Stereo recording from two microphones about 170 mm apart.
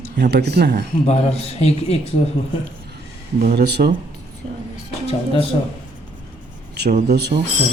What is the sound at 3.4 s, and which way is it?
Speech, 75° right (ahead or behind).